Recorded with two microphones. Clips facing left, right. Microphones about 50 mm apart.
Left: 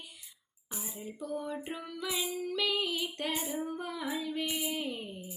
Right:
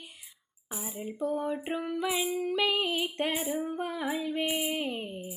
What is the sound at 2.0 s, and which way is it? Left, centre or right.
Female singing, right.